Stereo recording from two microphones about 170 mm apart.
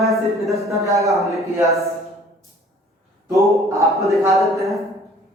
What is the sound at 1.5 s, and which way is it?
Speech, 20° right (ahead or behind).